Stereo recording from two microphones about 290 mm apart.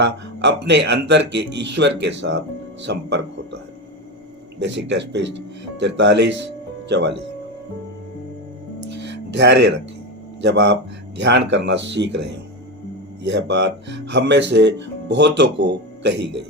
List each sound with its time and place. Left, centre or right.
0.0 s speech: right
4.6 s speech: right
9.3 s speech: right